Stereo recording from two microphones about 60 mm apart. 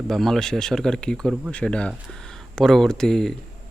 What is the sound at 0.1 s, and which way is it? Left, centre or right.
Speech, centre.